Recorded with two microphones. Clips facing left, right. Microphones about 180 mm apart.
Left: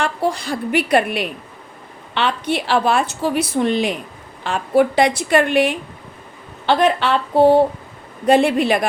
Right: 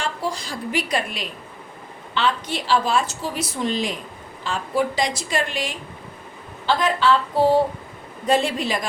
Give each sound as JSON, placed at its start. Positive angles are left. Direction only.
{"t": 0.0, "sound": "a woman's voice", "side_deg": 60}